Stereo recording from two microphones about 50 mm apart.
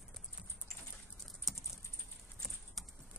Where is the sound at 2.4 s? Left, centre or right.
Centre.